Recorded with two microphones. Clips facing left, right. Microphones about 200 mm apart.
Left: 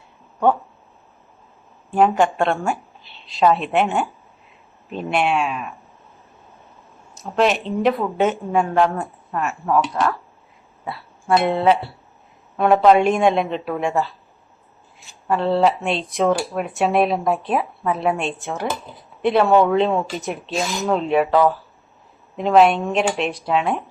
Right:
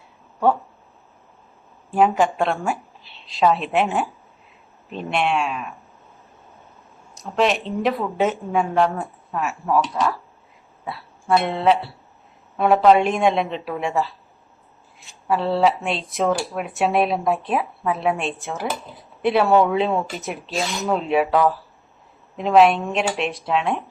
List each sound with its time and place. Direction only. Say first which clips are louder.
1.9 s speech: left 1 dB; centre (ahead or behind)
7.1 s speech: left 2 dB; centre (ahead or behind)
10.8 s a sound: left 1 dB; centre (ahead or behind)
11.3 s speech: left 2 dB; centre (ahead or behind)
15.3 s speech: left 1 dB; centre (ahead or behind)